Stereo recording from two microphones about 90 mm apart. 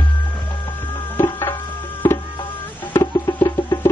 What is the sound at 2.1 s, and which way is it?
Music, 60° left (ahead or behind).